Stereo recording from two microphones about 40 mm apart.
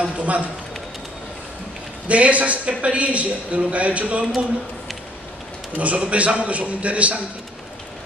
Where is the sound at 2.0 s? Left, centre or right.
Right.